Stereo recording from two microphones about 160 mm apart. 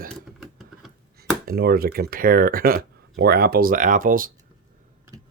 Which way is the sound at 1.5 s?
70° right (ahead or behind).